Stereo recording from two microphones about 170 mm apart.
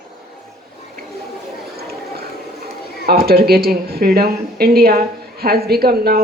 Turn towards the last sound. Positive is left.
turn(degrees=-65)  # may be behind; listen again after turning